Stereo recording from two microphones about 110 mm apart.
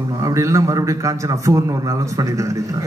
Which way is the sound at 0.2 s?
30° right (ahead or behind).